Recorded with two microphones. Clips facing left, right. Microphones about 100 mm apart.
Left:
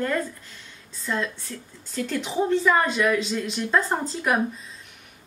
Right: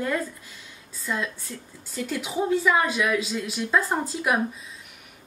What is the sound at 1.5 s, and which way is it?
Speech, 15° right (ahead or behind).